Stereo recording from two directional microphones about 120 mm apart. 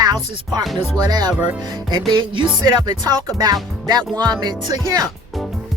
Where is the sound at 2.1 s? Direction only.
40° right (ahead or behind).